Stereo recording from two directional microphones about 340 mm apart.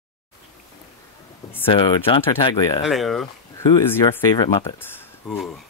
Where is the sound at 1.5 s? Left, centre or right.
Centre.